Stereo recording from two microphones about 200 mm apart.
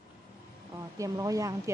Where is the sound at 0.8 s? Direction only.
15° right (ahead or behind).